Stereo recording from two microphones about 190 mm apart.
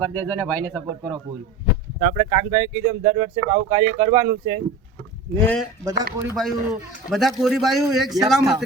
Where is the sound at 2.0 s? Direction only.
35° right (ahead or behind).